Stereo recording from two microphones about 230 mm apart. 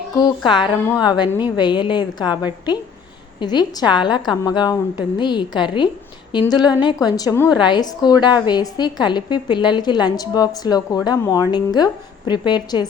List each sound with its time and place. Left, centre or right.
0.2 s a woman's voice: centre
3.4 s a woman's voice: centre